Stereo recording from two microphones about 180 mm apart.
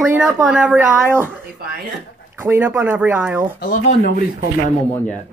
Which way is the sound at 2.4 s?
15° right (ahead or behind).